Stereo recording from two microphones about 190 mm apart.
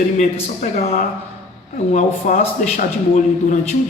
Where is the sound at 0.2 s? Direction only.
40° left (ahead or behind).